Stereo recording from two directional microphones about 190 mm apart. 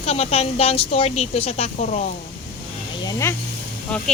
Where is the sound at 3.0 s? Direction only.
15° left (ahead or behind).